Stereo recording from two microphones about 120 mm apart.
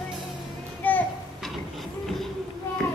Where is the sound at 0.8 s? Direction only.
15° left (ahead or behind).